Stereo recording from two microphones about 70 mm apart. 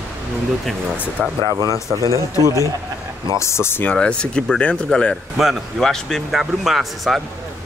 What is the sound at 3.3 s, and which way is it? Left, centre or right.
Speech, left.